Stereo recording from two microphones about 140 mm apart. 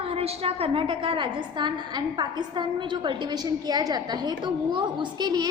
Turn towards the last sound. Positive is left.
turn(degrees=-30)  # may be behind; listen again after turning